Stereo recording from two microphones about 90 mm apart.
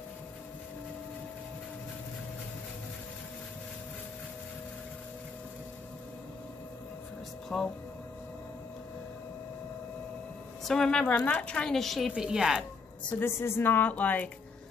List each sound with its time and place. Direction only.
7.4 s speech: 5° left (ahead or behind)
10.6 s a woman's voice: 5° left (ahead or behind)
13.2 s a woman's voice: 30° left (ahead or behind)